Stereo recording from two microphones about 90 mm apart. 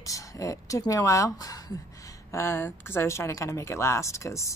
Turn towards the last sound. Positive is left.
turn(degrees=35)  # may be behind; listen again after turning